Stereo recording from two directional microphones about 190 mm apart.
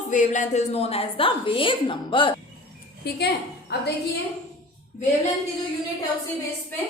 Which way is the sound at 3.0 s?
60° left (ahead or behind).